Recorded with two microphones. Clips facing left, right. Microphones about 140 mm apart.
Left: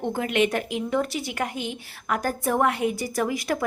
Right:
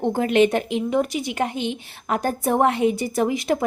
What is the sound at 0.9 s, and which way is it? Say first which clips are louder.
A woman's voice: right 3 dB; 15° right (ahead or behind).